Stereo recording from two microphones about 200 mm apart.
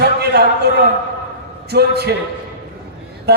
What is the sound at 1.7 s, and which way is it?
Speech, 55° right (ahead or behind).